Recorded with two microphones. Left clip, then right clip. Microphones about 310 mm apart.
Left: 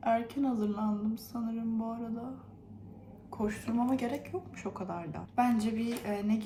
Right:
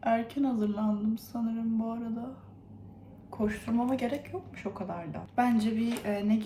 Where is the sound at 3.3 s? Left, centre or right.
Centre.